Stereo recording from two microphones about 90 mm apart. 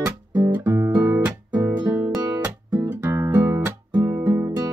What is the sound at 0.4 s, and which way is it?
Guitar, 30° right (ahead or behind).